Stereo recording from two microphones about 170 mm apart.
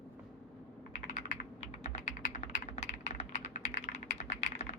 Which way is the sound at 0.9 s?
45° left (ahead or behind).